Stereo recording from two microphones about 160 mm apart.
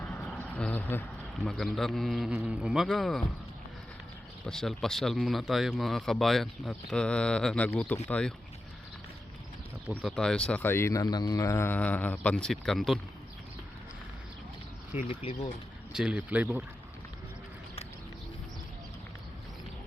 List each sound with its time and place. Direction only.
0.0 s a sound: 10° left (ahead or behind)
1.4 s speech: centre (ahead or behind)
4.4 s speech: centre (ahead or behind)
10.0 s speech: centre (ahead or behind)
15.1 s speech: 35° left (ahead or behind)
15.9 s speech: 5° right (ahead or behind)